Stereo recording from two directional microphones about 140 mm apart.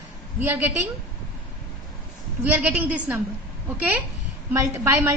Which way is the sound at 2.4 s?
15° right (ahead or behind).